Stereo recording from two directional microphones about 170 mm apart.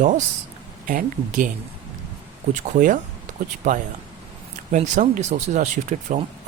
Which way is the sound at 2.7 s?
50° right (ahead or behind).